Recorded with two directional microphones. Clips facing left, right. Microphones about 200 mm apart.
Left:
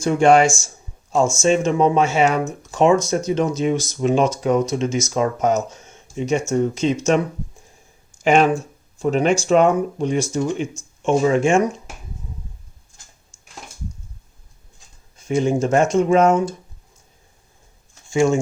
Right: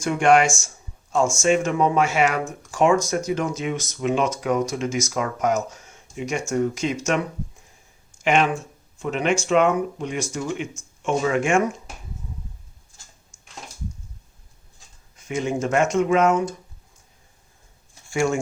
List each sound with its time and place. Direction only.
0.0 s speech: 25° left (ahead or behind)
8.2 s speech: 35° left (ahead or behind)
15.2 s speech: 30° left (ahead or behind)
18.1 s speech: 20° left (ahead or behind)